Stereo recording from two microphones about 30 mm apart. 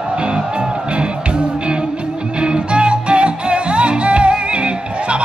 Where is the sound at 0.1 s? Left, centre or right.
Right.